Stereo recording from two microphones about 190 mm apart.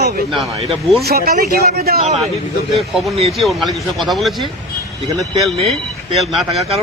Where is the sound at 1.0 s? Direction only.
55° right (ahead or behind).